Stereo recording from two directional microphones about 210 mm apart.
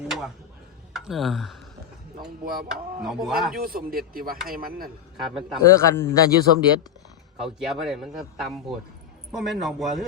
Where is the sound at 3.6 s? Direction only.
45° right (ahead or behind).